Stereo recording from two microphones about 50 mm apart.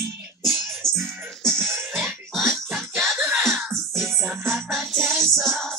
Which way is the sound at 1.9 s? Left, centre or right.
Centre.